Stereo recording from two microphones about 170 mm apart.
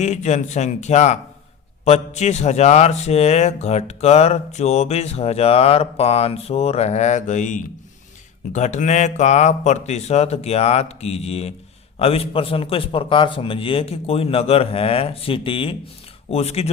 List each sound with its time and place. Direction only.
0.0 s a man's voice: 45° left (ahead or behind)